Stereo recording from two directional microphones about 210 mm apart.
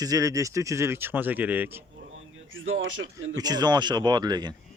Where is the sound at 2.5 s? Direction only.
70° right (ahead or behind).